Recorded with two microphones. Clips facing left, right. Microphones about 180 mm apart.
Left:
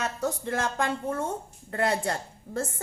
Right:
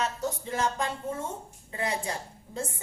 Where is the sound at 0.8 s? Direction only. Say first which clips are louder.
Left 4 dB; 70° left (ahead or behind).